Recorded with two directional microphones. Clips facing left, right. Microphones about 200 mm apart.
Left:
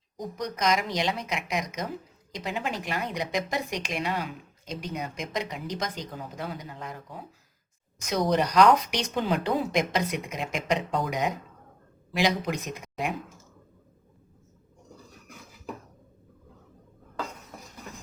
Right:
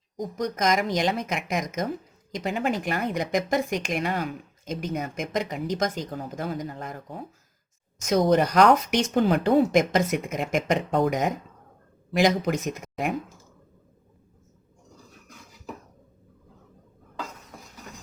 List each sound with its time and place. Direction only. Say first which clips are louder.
0.3 s speech: right 3 dB; 45° right (ahead or behind)